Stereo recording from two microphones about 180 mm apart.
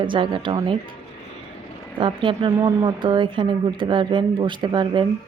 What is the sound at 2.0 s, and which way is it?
A woman's voice, 25° right (ahead or behind).